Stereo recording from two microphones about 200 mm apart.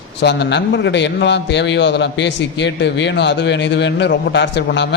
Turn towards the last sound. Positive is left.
turn(degrees=60)  # may be behind; listen again after turning